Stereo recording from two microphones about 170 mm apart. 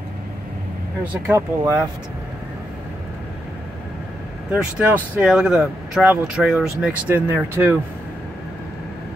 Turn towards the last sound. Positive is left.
turn(degrees=-10)  # may be behind; listen again after turning